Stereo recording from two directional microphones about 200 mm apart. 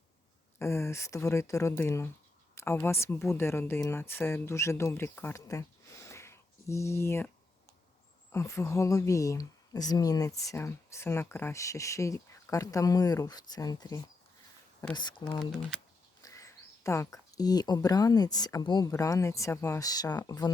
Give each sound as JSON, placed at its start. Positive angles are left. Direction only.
{"t": 0.6, "sound": "speech", "side_deg": 15}
{"t": 8.3, "sound": "speech", "side_deg": 15}
{"t": 16.2, "sound": "speech", "side_deg": 15}